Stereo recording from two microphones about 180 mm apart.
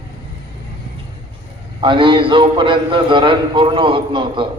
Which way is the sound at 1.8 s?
25° right (ahead or behind).